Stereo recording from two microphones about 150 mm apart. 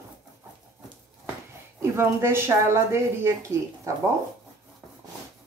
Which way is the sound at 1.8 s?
15° right (ahead or behind).